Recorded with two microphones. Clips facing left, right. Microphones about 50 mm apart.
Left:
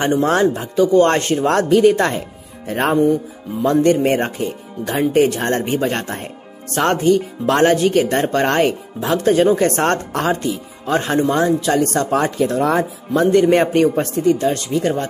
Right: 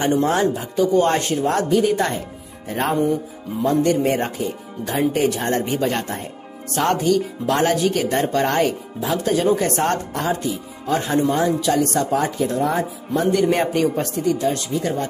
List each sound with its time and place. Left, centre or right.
0.0 s speech: left
2.7 s speech: left
9.2 s speech: left
12.0 s speech: left
13.3 s a man's voice: left
14.5 s speech: left